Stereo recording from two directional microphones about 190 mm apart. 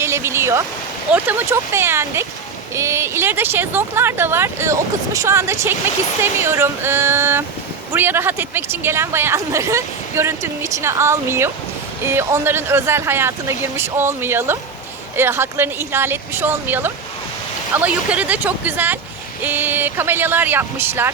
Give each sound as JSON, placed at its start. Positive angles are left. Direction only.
{"t": 0.0, "sound": "speech", "side_deg": -15}